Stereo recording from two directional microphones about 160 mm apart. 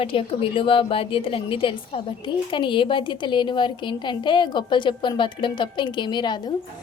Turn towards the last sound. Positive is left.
turn(degrees=30)  # may be behind; listen again after turning